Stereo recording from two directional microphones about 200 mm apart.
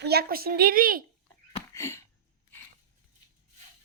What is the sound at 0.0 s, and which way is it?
A woman's voice, 50° right (ahead or behind).